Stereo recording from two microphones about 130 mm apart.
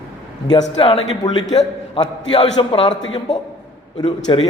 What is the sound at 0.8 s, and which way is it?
Speech, 45° left (ahead or behind).